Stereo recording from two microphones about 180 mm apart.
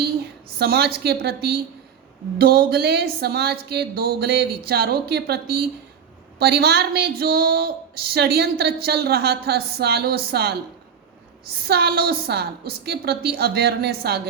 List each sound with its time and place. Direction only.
0.6 s speech: 60° right (ahead or behind)
11.6 s speech: 60° right (ahead or behind)